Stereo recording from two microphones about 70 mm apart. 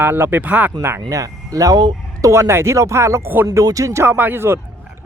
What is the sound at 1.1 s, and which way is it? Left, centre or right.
Speech, right.